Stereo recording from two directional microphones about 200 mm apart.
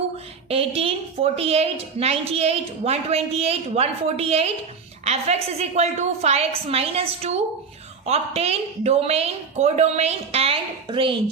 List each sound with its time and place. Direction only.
0.4 s a woman's voice: 30° right (ahead or behind)